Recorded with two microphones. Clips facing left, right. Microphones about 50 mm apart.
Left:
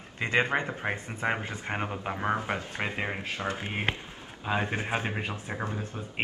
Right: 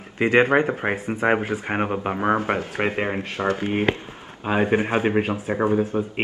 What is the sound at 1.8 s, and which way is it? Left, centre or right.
Speech, right.